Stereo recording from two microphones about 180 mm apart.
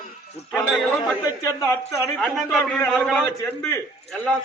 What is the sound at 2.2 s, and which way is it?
A man's voice, centre (ahead or behind).